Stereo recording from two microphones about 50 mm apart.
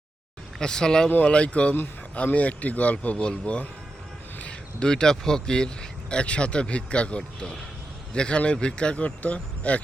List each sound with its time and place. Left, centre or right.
0.6 s a man's voice: centre
7.2 s a man's voice: centre; by 9.8 s left